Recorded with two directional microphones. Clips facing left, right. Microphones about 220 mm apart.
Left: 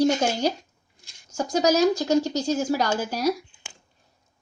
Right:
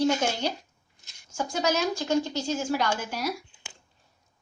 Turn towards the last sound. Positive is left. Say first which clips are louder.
# left 5 dB
turn(degrees=40)  # may be behind; listen again after turning